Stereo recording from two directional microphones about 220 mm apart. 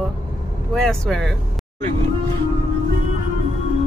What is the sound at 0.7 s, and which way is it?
Speech, 5° left (ahead or behind).